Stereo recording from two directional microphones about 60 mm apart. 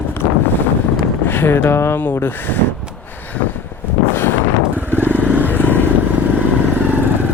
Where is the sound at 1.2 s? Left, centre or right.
Left.